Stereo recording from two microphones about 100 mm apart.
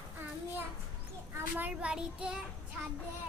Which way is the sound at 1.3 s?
15° right (ahead or behind).